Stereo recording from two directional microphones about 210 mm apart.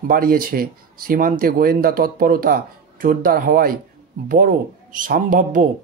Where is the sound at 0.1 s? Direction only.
45° right (ahead or behind).